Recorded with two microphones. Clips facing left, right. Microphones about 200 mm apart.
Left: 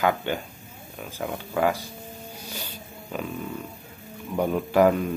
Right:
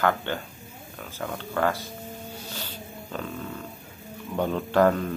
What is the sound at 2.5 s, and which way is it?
Snake, 10° left (ahead or behind).